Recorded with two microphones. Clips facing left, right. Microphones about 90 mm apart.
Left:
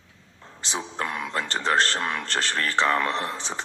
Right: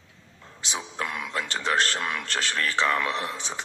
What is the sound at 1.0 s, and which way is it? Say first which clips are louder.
Speech: left 2 dB; 35° left (ahead or behind).